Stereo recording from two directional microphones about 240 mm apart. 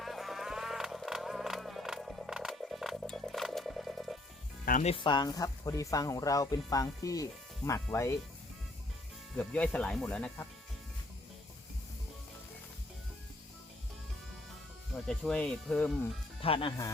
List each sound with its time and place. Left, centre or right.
0.0 s music: centre
4.6 s speech: left; by 8.1 s centre
9.3 s speech: centre
15.0 s speech: centre
16.4 s speech: left